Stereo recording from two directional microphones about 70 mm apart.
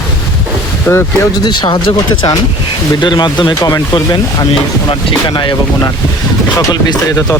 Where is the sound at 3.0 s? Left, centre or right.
Left.